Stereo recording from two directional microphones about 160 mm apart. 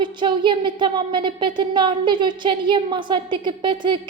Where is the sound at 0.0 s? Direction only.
30° right (ahead or behind).